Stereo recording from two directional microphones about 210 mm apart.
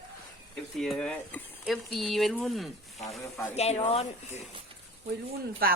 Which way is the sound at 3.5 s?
30° left (ahead or behind).